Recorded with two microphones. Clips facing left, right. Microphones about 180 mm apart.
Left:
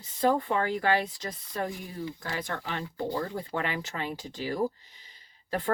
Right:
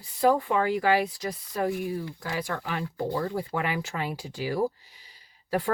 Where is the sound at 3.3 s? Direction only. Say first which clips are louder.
Right 3 dB; 10° right (ahead or behind).